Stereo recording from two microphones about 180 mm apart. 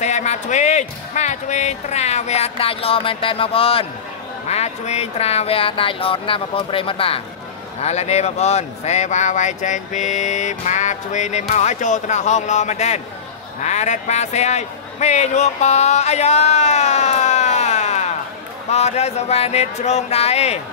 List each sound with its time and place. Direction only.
0.0 s a man's voice: 40° left (ahead or behind)